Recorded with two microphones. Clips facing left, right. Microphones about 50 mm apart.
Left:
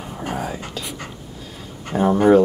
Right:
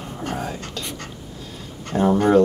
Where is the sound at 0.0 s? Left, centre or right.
Centre.